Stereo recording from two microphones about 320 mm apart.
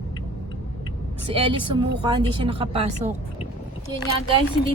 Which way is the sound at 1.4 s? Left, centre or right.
Centre.